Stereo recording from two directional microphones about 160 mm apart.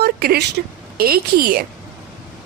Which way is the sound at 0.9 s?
70° right (ahead or behind).